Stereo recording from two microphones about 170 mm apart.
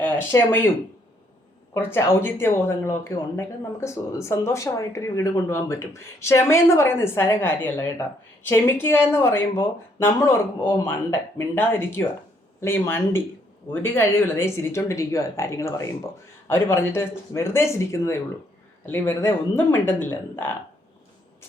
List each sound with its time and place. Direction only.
0.0 s speech: 10° left (ahead or behind)
1.7 s speech: 15° left (ahead or behind)